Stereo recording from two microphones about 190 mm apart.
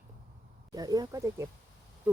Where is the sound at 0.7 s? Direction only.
20° right (ahead or behind).